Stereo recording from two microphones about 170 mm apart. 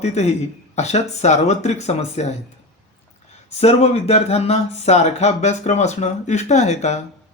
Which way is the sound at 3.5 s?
40° left (ahead or behind).